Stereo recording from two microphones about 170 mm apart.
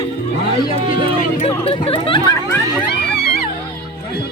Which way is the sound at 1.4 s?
35° left (ahead or behind).